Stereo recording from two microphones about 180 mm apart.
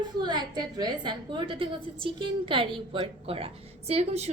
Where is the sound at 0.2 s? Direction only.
25° right (ahead or behind).